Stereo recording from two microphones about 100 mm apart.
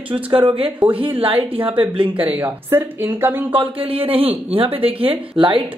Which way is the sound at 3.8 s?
70° right (ahead or behind).